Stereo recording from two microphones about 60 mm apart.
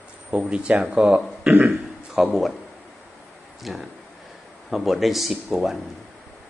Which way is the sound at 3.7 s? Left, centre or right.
Centre.